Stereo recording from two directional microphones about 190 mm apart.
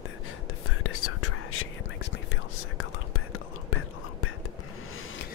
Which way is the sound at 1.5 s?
80° left.